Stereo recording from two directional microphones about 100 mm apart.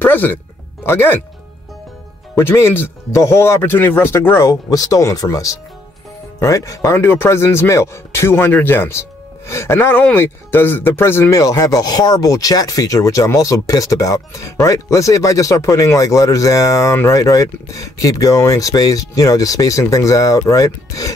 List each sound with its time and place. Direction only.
0.0 s speech: 20° left (ahead or behind)
2.3 s speech: 25° left (ahead or behind)